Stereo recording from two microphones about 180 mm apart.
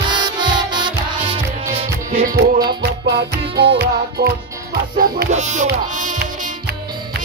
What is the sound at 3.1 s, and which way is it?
Music, 65° right (ahead or behind).